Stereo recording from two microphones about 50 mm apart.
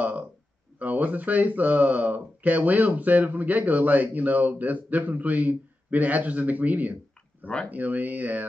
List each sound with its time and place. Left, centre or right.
0.7 s speech: right